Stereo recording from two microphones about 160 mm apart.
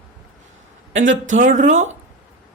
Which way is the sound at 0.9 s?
50° right (ahead or behind).